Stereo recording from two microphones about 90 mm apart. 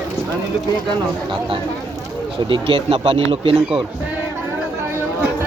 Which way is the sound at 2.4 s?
70° right (ahead or behind).